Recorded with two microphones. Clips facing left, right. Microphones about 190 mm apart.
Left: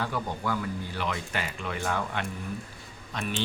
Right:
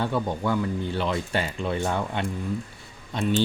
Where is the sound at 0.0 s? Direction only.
25° right (ahead or behind).